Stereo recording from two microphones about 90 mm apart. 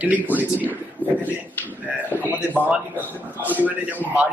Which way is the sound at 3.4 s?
20° right (ahead or behind).